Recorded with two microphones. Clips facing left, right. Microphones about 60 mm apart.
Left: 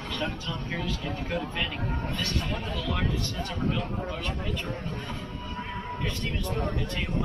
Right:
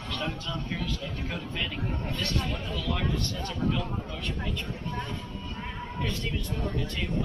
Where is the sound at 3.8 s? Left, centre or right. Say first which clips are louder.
Left 2 dB; left.